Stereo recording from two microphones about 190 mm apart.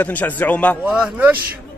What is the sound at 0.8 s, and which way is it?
Speech, 5° right (ahead or behind).